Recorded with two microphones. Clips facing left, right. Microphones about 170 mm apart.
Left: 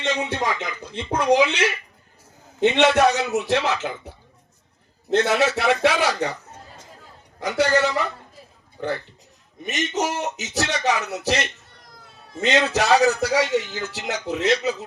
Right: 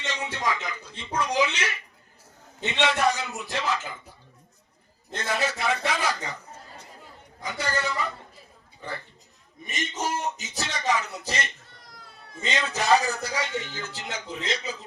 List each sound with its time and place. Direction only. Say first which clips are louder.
0.0 s a man's voice: left 6 dB; 65° left (ahead or behind)
5.1 s a man's voice: left 9 dB; 75° left (ahead or behind)
7.3 s a man's voice: left 10 dB; 75° left (ahead or behind)
8.8 s a man's voice: left 11 dB; 90° left
9.6 s a man's voice: left 6 dB; 75° left (ahead or behind)